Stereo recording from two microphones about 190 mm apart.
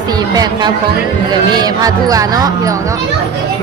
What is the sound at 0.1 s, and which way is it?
Speech, 20° right (ahead or behind).